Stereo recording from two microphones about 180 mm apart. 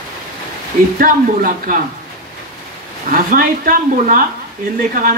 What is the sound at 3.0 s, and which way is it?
A woman's voice, 50° right (ahead or behind).